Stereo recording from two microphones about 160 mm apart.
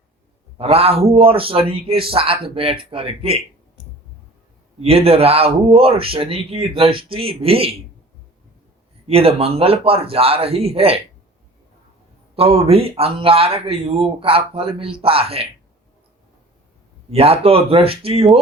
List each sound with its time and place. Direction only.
0.6 s speech: 40° right (ahead or behind)
4.8 s speech: 40° right (ahead or behind)
9.0 s speech: 40° right (ahead or behind)
12.4 s speech: 40° right (ahead or behind)
17.1 s speech: 40° right (ahead or behind)